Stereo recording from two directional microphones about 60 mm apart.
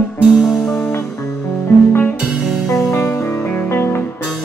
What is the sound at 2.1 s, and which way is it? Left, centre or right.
Music, centre.